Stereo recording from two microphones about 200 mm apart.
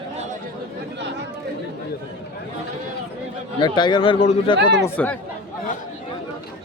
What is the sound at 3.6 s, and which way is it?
Speech, 20° left (ahead or behind).